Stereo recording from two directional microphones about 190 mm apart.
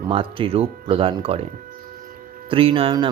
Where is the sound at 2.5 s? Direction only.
30° right (ahead or behind).